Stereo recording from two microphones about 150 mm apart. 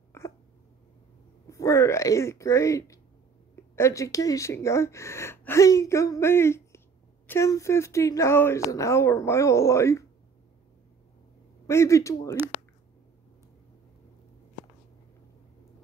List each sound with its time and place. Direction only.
0.1 s a sound: 15° left (ahead or behind)
1.5 s speech: 20° left (ahead or behind)
11.6 s speech: 20° left (ahead or behind)